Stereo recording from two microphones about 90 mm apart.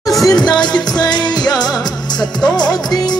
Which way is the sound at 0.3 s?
50° left (ahead or behind).